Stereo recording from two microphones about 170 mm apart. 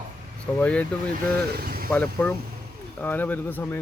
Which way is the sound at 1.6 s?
60° right (ahead or behind).